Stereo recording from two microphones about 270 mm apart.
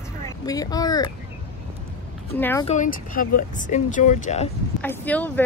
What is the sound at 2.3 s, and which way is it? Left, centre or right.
Speech, centre.